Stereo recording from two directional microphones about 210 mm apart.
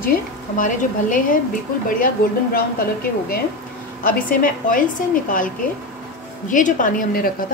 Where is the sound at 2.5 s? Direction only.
45° left (ahead or behind).